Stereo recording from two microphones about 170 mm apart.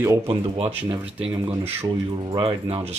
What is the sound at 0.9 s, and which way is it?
Speech, 10° right (ahead or behind).